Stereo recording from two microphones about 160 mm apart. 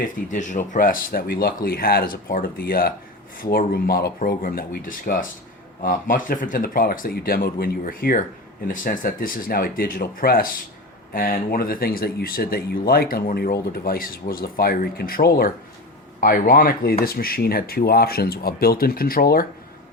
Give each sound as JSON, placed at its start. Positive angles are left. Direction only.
{"t": 0.3, "sound": "speech", "side_deg": 50}